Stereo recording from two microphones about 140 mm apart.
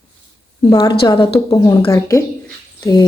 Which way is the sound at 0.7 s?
30° left (ahead or behind).